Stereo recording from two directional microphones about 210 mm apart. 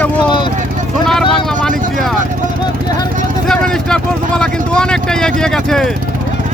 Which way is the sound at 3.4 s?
5° left (ahead or behind).